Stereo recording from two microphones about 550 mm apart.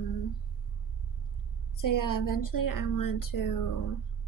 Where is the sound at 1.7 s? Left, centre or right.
Left.